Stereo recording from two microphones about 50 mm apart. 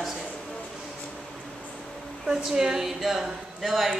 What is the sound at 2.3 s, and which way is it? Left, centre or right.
A woman's voice, centre.